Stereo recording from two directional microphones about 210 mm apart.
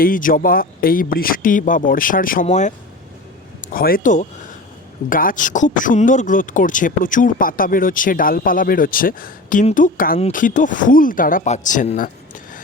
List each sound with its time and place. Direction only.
0.0 s speech: 40° left (ahead or behind)